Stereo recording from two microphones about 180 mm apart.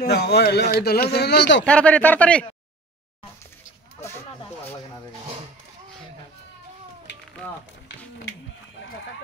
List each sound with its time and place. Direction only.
0.0 s a man's voice: 60° left (ahead or behind)
1.6 s speech: 5° left (ahead or behind)